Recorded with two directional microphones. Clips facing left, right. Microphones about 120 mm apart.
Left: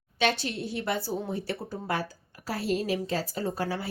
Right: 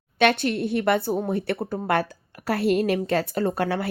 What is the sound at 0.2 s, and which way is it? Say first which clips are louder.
A woman's voice: right 7 dB; 60° right (ahead or behind).